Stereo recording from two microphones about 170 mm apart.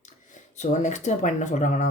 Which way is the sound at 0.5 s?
45° left (ahead or behind).